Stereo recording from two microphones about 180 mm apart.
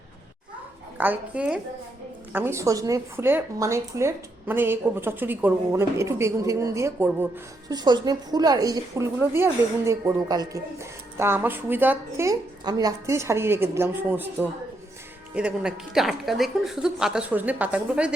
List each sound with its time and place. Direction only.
0.9 s a woman's voice: 10° right (ahead or behind)